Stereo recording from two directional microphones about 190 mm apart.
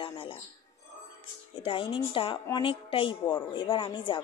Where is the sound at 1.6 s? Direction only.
25° left (ahead or behind).